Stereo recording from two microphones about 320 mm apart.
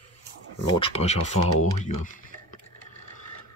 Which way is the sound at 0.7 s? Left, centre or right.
Centre.